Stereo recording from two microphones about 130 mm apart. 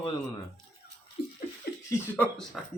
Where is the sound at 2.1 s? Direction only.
10° left (ahead or behind).